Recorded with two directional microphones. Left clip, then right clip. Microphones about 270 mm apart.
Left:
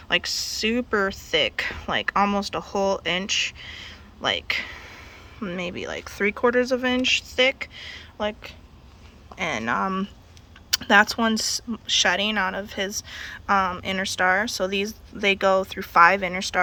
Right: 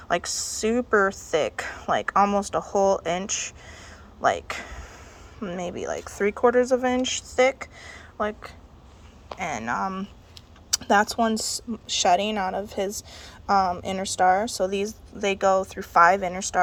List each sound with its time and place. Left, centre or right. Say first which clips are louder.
0.1 s speech: left 2 dB; centre
9.5 s speech: left 3 dB; centre
10.8 s a woman's voice: left 3 dB; centre
13.5 s speech: even; centre
13.8 s a woman's voice: right 1 dB; centre
15.9 s speech: left 1 dB; centre